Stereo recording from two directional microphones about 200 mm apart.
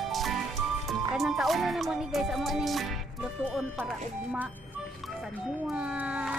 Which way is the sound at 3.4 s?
Centre (ahead or behind).